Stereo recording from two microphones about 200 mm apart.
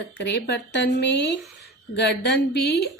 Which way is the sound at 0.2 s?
55° left (ahead or behind).